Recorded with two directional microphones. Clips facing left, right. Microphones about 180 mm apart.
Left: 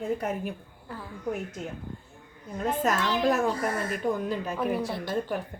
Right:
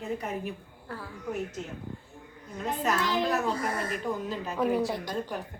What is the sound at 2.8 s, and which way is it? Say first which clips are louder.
Speech: left 1 dB; 45° left (ahead or behind).